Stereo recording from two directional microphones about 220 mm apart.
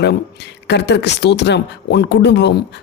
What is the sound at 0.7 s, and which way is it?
Speech, 50° left (ahead or behind).